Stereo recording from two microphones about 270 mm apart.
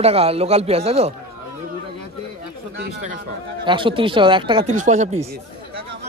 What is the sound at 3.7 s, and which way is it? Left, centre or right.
A man's voice, centre.